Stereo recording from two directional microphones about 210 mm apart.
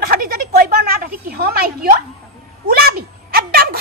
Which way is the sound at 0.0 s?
45° right (ahead or behind).